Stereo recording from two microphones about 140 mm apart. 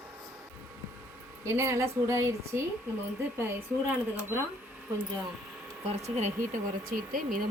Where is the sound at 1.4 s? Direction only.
20° right (ahead or behind).